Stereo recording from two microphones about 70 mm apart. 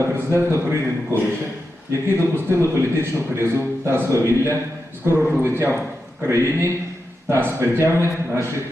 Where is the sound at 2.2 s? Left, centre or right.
Right.